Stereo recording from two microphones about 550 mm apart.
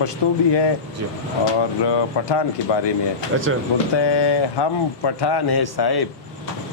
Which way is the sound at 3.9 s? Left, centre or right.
Left.